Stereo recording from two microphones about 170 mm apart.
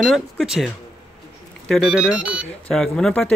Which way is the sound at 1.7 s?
5° right (ahead or behind).